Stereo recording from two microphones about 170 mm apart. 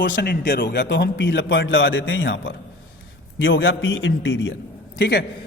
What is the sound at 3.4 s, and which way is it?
Speech, 90° left.